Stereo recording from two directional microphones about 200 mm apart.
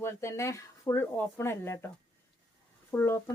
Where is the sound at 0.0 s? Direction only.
15° left (ahead or behind).